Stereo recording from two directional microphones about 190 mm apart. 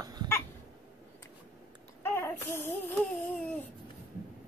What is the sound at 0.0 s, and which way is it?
Cough, 20° right (ahead or behind).